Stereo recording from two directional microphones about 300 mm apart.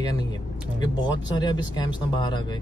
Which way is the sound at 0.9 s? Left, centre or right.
Centre.